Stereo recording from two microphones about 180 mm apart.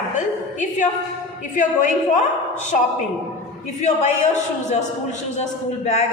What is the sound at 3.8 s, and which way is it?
Speech, 40° left (ahead or behind).